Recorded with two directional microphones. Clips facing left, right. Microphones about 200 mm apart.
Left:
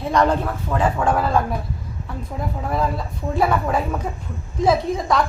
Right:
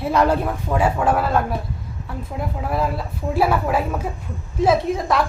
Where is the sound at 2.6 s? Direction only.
5° right (ahead or behind).